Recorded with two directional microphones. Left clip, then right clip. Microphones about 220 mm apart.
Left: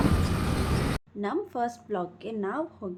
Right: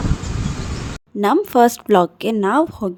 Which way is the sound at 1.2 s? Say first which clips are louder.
Right 17 dB; 50° right (ahead or behind).